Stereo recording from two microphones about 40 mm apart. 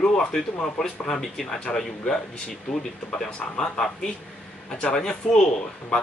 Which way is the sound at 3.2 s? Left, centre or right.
Centre.